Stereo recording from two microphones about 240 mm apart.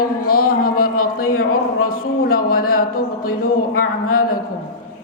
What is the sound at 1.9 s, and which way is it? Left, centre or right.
A man's voice, left.